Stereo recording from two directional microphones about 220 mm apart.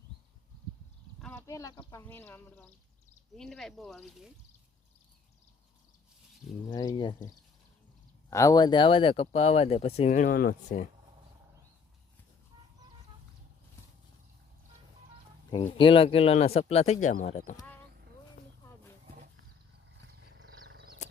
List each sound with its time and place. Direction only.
1.2 s speech: 10° left (ahead or behind)
6.7 s speech: 20° left (ahead or behind)
8.3 s speech: 15° left (ahead or behind); by 10.8 s 35° left (ahead or behind)
15.8 s speech: 25° left (ahead or behind)
20.4 s wild animals: 60° right (ahead or behind)